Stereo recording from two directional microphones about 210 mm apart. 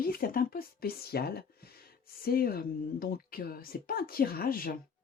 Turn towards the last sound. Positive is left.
turn(degrees=45)  # may be behind; listen again after turning